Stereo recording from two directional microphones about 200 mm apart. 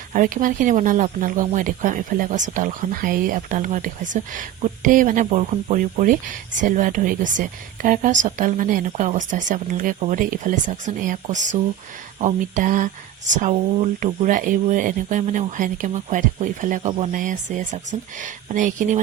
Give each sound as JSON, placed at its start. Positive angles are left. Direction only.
{"t": 0.1, "sound": "speech", "side_deg": -40}